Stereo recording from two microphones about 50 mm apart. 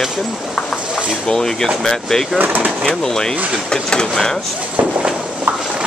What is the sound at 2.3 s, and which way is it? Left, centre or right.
Speech, right.